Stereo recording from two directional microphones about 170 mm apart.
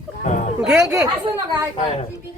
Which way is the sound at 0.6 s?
5° right (ahead or behind).